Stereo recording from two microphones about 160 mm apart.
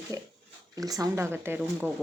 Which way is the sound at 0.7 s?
20° right (ahead or behind).